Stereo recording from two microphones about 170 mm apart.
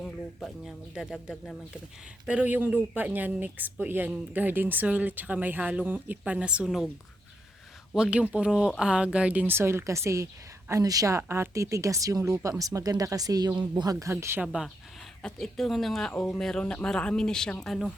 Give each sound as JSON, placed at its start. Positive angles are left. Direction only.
{"t": 0.0, "sound": "speech", "side_deg": 5}
{"t": 7.9, "sound": "speech", "side_deg": -5}
{"t": 14.4, "sound": "speech", "side_deg": -5}